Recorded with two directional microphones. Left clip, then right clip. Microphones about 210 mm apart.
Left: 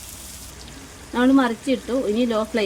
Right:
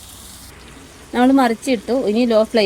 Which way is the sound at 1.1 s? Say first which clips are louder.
Right 4 dB; 40° right (ahead or behind).